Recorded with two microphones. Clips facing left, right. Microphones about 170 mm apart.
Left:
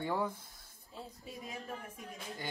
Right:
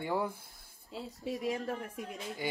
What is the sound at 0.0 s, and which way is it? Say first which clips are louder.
Speech: right 2 dB; 10° right (ahead or behind).